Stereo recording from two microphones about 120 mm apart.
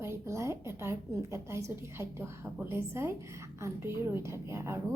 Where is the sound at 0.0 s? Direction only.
25° right (ahead or behind).